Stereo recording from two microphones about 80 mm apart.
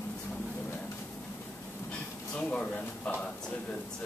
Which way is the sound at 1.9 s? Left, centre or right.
Centre.